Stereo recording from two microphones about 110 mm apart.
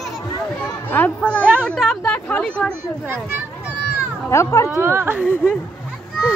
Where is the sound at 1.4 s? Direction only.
15° right (ahead or behind).